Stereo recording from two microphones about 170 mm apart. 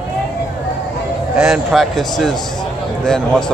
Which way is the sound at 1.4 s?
Centre (ahead or behind).